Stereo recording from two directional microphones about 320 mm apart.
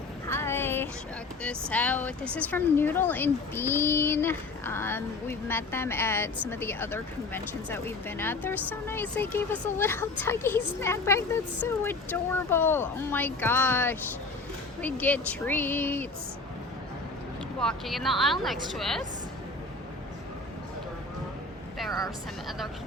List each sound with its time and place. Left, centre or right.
0.3 s a sound: centre
1.4 s a woman's voice: centre
17.6 s speech: centre
22.4 s speech: centre